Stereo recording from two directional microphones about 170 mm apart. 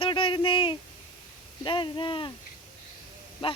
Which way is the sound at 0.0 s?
30° left (ahead or behind).